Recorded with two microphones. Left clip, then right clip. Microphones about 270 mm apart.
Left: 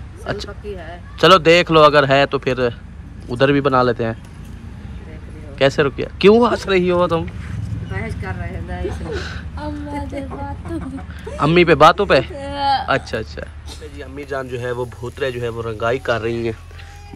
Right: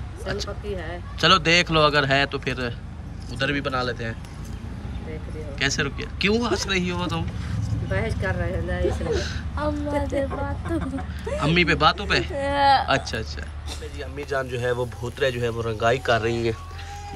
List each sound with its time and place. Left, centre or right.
0.2 s speech: centre
5.6 s speech: centre
7.9 s speech: right
8.8 s speech: centre